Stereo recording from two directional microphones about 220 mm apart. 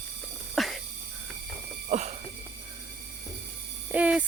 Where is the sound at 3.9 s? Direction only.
5° right (ahead or behind).